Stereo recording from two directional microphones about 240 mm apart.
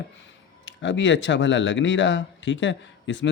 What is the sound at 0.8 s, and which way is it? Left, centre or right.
Speech, left.